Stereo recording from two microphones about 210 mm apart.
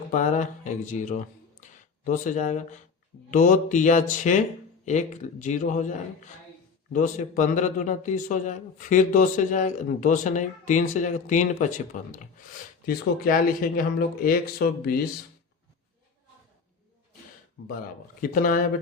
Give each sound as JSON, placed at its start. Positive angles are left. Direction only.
{"t": 0.1, "sound": "a man's voice", "side_deg": 35}
{"t": 18.2, "sound": "a man's voice", "side_deg": 40}